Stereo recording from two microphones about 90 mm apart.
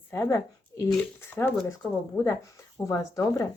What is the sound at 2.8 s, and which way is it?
Speech, 40° left (ahead or behind).